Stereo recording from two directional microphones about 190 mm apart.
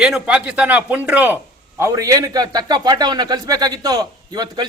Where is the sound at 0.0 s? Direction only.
5° right (ahead or behind).